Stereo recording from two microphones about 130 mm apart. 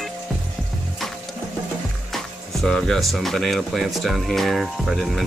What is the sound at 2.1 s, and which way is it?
Speech, 5° left (ahead or behind).